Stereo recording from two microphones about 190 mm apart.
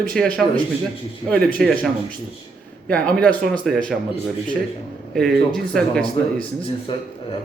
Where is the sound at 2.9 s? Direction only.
5° left (ahead or behind).